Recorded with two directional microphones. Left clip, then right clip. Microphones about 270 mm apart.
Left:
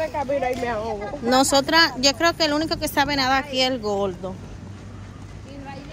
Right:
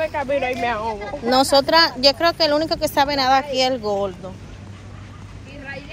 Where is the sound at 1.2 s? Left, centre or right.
Centre.